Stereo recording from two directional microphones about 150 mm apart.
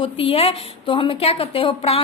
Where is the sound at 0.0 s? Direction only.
35° left (ahead or behind).